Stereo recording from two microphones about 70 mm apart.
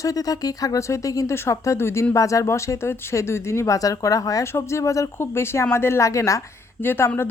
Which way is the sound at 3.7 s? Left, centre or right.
Left.